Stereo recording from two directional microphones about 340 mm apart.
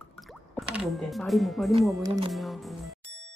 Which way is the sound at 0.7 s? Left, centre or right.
Centre.